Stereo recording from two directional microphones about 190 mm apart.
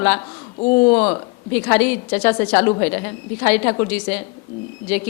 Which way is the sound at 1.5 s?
10° left (ahead or behind).